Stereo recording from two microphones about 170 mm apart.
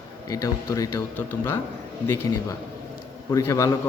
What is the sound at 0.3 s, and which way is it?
Speech, 20° left (ahead or behind).